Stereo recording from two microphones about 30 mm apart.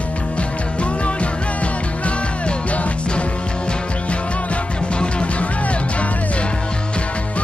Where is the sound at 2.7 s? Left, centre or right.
Left.